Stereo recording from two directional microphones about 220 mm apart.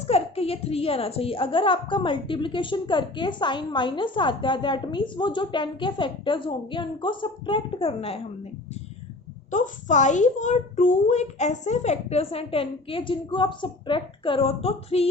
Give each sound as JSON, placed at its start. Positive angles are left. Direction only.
{"t": 0.1, "sound": "a woman's voice", "side_deg": 25}
{"t": 9.5, "sound": "a woman's voice", "side_deg": 35}